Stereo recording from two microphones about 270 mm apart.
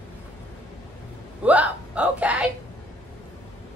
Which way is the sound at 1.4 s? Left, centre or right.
Centre.